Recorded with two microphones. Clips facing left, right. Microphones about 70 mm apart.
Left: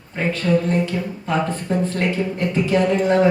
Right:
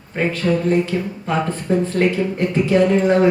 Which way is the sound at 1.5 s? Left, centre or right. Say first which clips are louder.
Right 2 dB; left.